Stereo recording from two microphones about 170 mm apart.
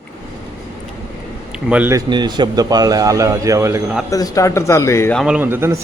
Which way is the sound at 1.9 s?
25° right (ahead or behind).